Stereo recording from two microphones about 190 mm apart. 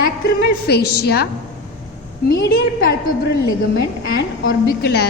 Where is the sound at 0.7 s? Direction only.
60° left (ahead or behind).